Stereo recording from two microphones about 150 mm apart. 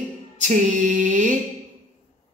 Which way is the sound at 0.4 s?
55° right (ahead or behind).